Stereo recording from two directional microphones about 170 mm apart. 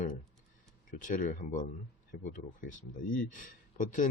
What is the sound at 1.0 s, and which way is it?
Speech, 45° left (ahead or behind).